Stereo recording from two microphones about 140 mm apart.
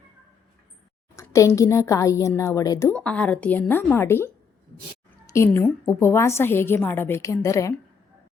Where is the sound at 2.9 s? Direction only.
10° left (ahead or behind).